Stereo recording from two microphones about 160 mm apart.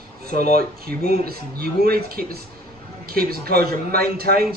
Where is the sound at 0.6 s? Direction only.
70° right (ahead or behind).